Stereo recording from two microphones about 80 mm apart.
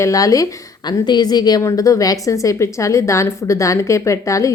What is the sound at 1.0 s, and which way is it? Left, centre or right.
Speech, left.